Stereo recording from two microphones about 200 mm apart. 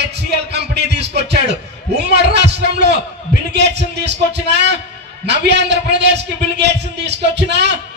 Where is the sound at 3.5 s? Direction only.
60° right (ahead or behind).